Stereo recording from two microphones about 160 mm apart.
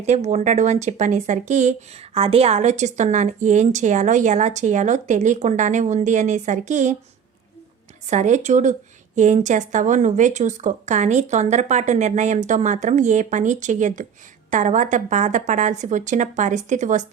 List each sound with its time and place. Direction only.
0.0 s speech: 45° right (ahead or behind)
8.0 s speech: 50° right (ahead or behind)